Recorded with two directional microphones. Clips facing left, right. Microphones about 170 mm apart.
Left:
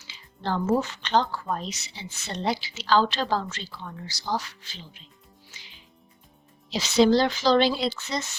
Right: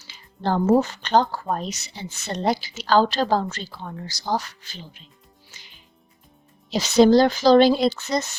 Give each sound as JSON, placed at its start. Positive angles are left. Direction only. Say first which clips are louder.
{"t": 0.0, "sound": "speech", "louder": "right 6 dB", "side_deg": -45}
{"t": 6.7, "sound": "speech", "louder": "right 4 dB", "side_deg": -45}